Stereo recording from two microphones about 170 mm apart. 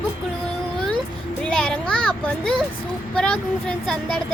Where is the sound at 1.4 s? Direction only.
5° left (ahead or behind).